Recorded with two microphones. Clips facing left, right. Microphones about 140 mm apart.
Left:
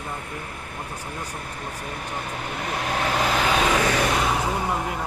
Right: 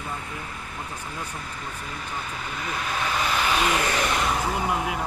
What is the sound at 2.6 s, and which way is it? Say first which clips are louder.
Speech: left 3 dB; 65° left (ahead or behind).